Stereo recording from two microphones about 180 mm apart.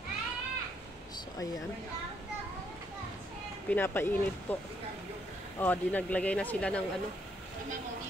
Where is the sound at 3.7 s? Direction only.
10° left (ahead or behind).